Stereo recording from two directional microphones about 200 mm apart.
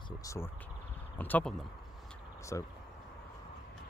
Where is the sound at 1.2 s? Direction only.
5° left (ahead or behind).